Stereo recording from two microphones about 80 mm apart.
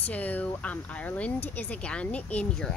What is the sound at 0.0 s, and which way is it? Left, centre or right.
Speech, centre.